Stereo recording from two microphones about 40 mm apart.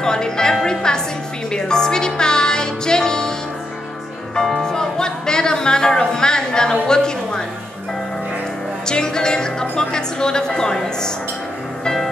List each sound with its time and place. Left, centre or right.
0.0 s a woman's voice: centre
1.5 s music: centre
4.4 s speech: centre
8.8 s a woman's voice: centre
11.8 s music: centre